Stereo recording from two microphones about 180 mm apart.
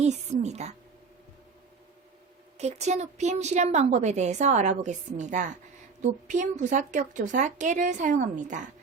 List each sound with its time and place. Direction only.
0.0 s a woman's voice: 40° right (ahead or behind)
2.6 s a woman's voice: 40° right (ahead or behind)